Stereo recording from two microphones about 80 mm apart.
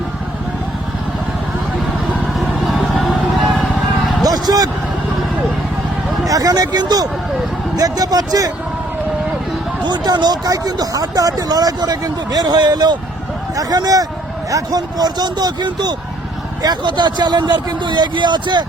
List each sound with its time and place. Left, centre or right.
2.4 s vehicle: centre
4.2 s a sound: right
6.2 s speech: right
9.8 s speech: right
13.6 s speech: right